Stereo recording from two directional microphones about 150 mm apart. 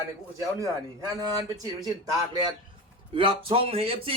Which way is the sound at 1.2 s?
25° right (ahead or behind).